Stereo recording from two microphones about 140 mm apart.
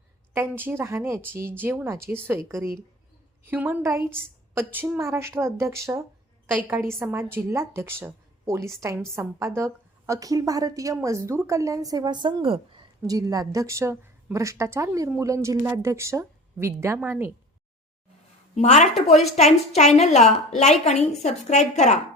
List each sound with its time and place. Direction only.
0.3 s a woman's voice: 15° right (ahead or behind); by 12.8 s 35° right (ahead or behind)
13.0 s a woman's voice: 25° right (ahead or behind)
18.5 s a woman's voice: 55° left (ahead or behind)